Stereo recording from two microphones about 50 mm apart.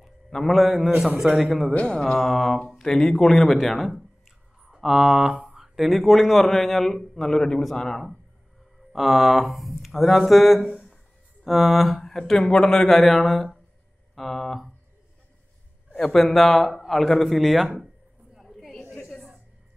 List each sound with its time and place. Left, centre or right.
0.5 s a man's voice: centre
1.4 s speech: centre
1.7 s speech: left
2.1 s speech: centre
8.9 s speech: centre
10.7 s a sound: centre
11.4 s speech: centre
16.0 s speech: centre
18.4 s a sound: centre